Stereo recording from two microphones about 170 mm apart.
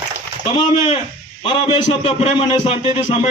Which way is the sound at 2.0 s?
30° left (ahead or behind).